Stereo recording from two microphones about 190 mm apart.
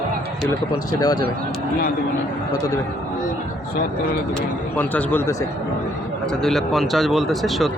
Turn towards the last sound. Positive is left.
turn(degrees=0)  # may be behind; listen again after turning